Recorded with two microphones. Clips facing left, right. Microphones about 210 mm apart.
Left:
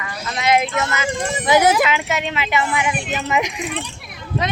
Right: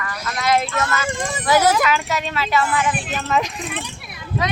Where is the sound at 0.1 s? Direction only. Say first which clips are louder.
Left 2 dB; 20° left (ahead or behind).